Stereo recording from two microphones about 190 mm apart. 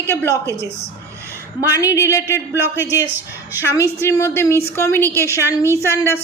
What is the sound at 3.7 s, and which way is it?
A woman's voice, 15° left (ahead or behind).